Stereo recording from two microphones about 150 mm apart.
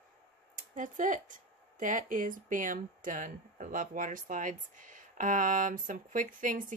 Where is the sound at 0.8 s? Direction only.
60° right (ahead or behind).